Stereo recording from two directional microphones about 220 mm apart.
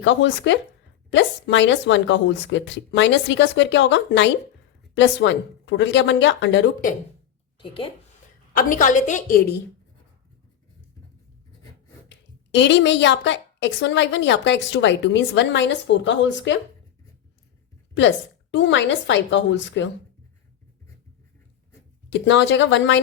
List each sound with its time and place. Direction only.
0.0 s a woman's voice: 55° left (ahead or behind)
7.6 s a woman's voice: 25° left (ahead or behind)
8.5 s a woman's voice: 40° left (ahead or behind)
12.0 s a woman's voice: 55° left (ahead or behind)
18.5 s a woman's voice: 55° left (ahead or behind)
22.1 s a woman's voice: 55° left (ahead or behind)